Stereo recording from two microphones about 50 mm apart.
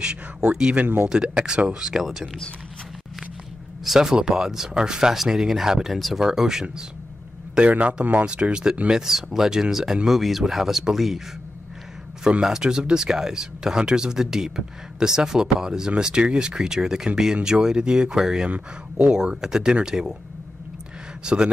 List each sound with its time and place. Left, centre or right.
0.0 s speech: centre
3.8 s speech: centre
5.9 s speech: centre
6.2 s speech: centre
7.5 s a man's voice: right
8.9 s speech: centre
12.3 s speech: centre
21.2 s speech: centre